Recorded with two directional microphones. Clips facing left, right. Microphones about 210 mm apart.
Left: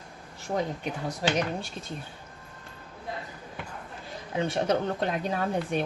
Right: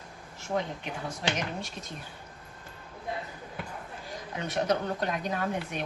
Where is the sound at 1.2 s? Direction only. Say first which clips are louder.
Left 5 dB; 40° left (ahead or behind).